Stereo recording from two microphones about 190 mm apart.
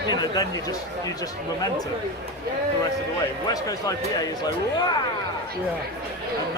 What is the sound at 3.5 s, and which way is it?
Speech, 20° left (ahead or behind).